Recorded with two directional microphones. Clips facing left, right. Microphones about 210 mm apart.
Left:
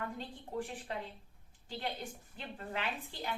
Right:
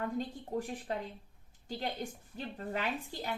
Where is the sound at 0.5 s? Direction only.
45° right (ahead or behind).